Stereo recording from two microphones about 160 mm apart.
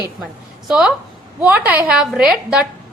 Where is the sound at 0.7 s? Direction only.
5° right (ahead or behind).